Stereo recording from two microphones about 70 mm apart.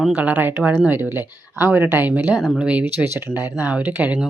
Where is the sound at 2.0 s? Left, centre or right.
Right.